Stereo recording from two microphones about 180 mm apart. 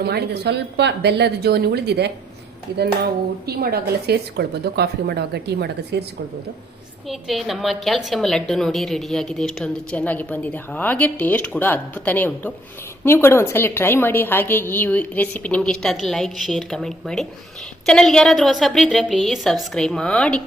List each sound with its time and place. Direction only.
0.0 s speech: 65° right (ahead or behind)
7.1 s a woman's voice: centre (ahead or behind)